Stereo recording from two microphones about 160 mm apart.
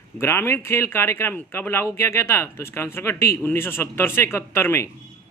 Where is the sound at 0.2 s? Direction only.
15° left (ahead or behind).